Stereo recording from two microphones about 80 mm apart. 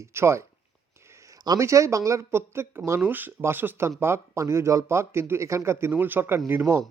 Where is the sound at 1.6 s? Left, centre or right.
Right.